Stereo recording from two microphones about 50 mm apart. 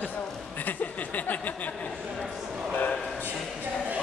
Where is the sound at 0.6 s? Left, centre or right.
Left.